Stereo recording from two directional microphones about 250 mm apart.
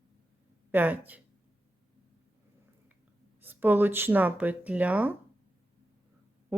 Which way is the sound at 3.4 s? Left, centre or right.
Centre.